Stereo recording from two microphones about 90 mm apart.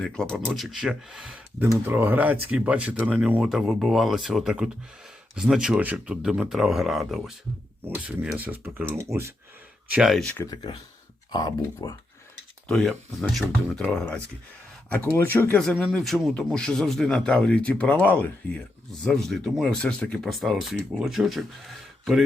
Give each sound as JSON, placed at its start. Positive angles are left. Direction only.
{"t": 0.0, "sound": "speech", "side_deg": 10}
{"t": 1.8, "sound": "speech", "side_deg": -20}
{"t": 3.5, "sound": "speech", "side_deg": -5}
{"t": 6.5, "sound": "speech", "side_deg": -5}
{"t": 7.9, "sound": "speech", "side_deg": -15}
{"t": 10.0, "sound": "speech", "side_deg": 0}
{"t": 10.4, "sound": "speech", "side_deg": 50}
{"t": 12.7, "sound": "speech", "side_deg": 5}
{"t": 14.9, "sound": "speech", "side_deg": 25}
{"t": 15.5, "sound": "speech", "side_deg": 10}
{"t": 18.9, "sound": "speech", "side_deg": 5}
{"t": 20.3, "sound": "speech", "side_deg": 0}